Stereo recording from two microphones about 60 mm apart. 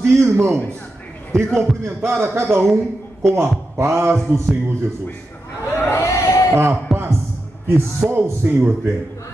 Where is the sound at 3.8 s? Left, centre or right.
Right.